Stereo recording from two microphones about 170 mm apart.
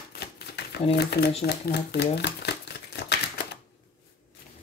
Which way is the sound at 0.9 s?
70° left (ahead or behind).